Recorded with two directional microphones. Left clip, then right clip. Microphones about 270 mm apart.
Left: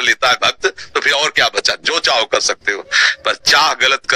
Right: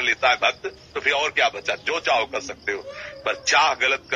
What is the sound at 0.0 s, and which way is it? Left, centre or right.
A man's voice, left.